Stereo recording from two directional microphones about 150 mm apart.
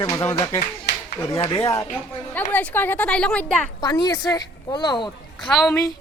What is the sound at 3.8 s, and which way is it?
A woman's voice, 25° left (ahead or behind).